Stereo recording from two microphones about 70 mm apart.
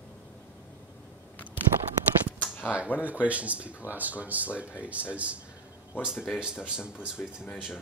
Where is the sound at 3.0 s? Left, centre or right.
Right.